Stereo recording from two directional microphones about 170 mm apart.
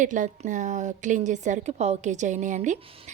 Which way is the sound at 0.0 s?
50° right (ahead or behind).